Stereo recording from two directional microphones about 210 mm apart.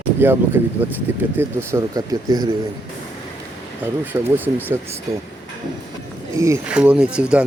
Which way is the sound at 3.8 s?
10° right (ahead or behind).